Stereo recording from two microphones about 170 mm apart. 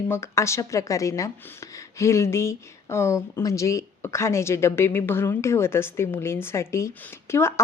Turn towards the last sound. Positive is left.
turn(degrees=15)  # may be behind; listen again after turning